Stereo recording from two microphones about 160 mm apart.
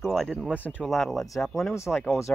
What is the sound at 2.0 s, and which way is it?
Speech, 20° left (ahead or behind).